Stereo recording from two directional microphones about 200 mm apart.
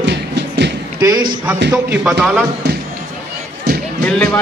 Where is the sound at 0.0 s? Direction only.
60° right (ahead or behind).